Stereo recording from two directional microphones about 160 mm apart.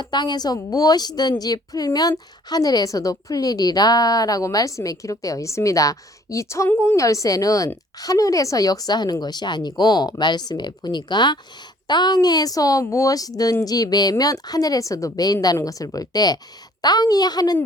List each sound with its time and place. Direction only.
0.0 s a woman's voice: 25° left (ahead or behind)